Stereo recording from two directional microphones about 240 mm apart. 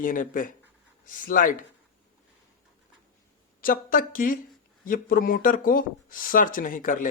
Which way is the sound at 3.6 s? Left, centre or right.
Left.